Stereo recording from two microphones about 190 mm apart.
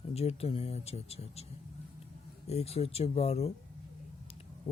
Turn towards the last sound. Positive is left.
turn(degrees=30)  # may be behind; listen again after turning